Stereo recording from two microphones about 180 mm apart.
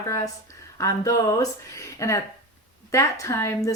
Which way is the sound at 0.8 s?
20° left (ahead or behind).